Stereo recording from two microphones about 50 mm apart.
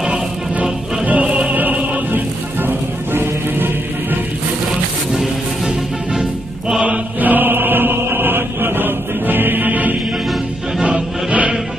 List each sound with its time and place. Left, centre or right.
0.6 s music: right
2.6 s music: right
7.2 s chant: right
10.8 s music: right